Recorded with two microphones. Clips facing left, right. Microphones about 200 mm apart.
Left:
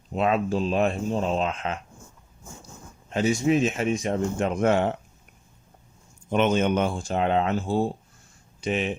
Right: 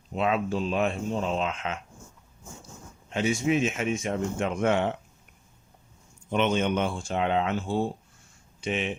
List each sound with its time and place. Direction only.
0.1 s speech: 40° left (ahead or behind)
3.1 s speech: 40° left (ahead or behind)
6.3 s speech: 45° left (ahead or behind)